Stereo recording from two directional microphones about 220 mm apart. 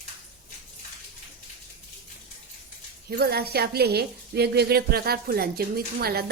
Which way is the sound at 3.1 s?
45° right (ahead or behind).